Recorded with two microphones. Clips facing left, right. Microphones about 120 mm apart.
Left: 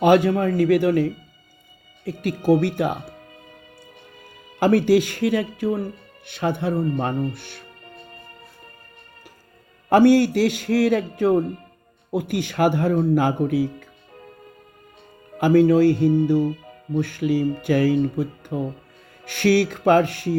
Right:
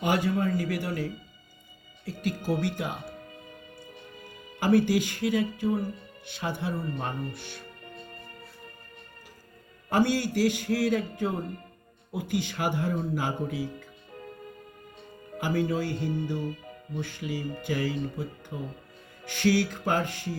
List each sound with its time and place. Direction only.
0.0 s a man's voice: 65° left (ahead or behind)
4.6 s a man's voice: 70° left (ahead or behind)
9.9 s a man's voice: 70° left (ahead or behind)
12.1 s a man's voice: 75° left (ahead or behind)
15.4 s a man's voice: 75° left (ahead or behind)